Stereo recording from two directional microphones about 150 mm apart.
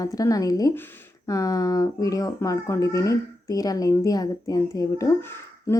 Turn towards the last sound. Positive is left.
turn(degrees=15)  # may be behind; listen again after turning